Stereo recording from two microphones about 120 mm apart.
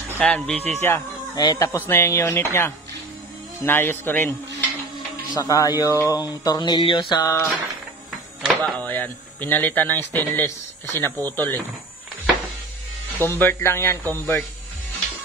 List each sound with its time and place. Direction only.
0.2 s speech: 10° left (ahead or behind)
0.6 s speech: 65° right (ahead or behind)
0.8 s speech: 20° left (ahead or behind)
5.3 s a sound: 30° left (ahead or behind)
8.4 s speech: 5° right (ahead or behind)
8.7 s speech: 15° left (ahead or behind)
13.2 s speech: 20° left (ahead or behind)